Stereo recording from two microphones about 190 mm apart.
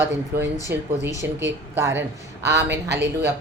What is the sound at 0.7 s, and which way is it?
A woman's voice, 15° right (ahead or behind).